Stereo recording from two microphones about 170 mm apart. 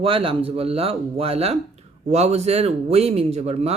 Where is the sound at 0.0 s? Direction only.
30° right (ahead or behind).